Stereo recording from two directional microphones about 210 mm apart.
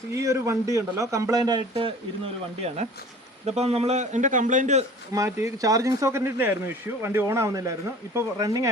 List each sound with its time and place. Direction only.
0.1 s a man's voice: 15° right (ahead or behind); by 4.9 s 35° right (ahead or behind)
5.1 s speech: 15° right (ahead or behind)